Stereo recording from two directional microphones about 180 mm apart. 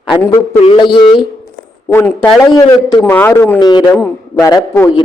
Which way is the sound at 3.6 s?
25° left (ahead or behind).